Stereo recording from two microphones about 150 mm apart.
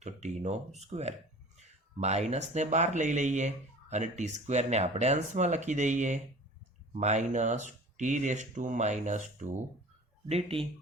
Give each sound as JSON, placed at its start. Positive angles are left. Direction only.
{"t": 0.0, "sound": "speech", "side_deg": -50}
{"t": 10.2, "sound": "speech", "side_deg": -40}